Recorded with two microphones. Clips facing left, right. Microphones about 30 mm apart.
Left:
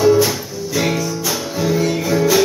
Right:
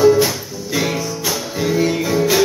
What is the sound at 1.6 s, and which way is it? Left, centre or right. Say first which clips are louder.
Music: right 1 dB; centre.